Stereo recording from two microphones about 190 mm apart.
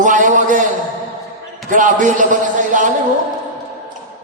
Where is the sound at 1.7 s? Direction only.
45° right (ahead or behind).